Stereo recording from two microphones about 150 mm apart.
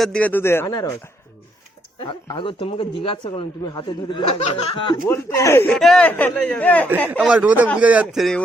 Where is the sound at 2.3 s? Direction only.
35° left (ahead or behind).